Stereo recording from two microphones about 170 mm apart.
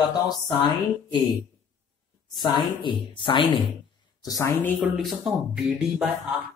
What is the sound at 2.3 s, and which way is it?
Speech, 25° left (ahead or behind).